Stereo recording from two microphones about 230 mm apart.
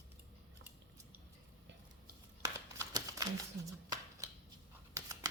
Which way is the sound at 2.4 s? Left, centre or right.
Centre.